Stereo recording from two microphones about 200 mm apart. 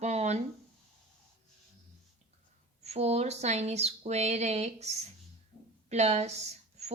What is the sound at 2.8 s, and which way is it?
Speech, 30° right (ahead or behind).